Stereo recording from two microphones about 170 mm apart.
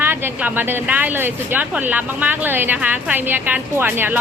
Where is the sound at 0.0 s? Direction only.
10° right (ahead or behind).